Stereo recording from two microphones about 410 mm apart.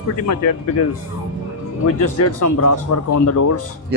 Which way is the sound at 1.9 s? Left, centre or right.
Left.